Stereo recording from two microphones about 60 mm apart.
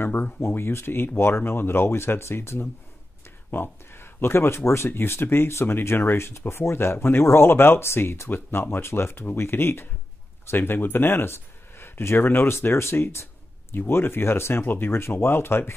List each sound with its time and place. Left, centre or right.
0.0 s speech: left